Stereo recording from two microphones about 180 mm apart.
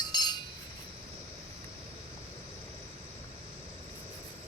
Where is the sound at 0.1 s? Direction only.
25° left (ahead or behind).